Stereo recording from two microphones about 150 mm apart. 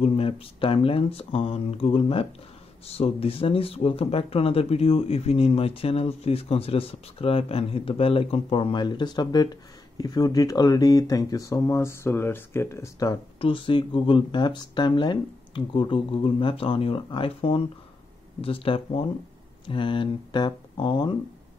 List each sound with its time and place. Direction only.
0.0 s speech: 40° left (ahead or behind); by 13.2 s 20° left (ahead or behind)
13.4 s speech: 35° left (ahead or behind)